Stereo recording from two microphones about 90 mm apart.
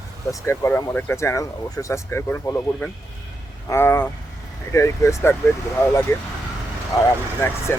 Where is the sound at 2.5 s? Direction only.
45° left (ahead or behind).